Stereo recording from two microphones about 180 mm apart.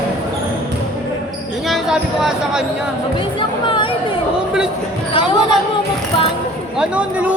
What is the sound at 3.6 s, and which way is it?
Chatter, 30° left (ahead or behind).